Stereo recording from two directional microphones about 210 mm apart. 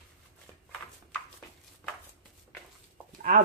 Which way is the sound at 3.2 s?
40° right (ahead or behind).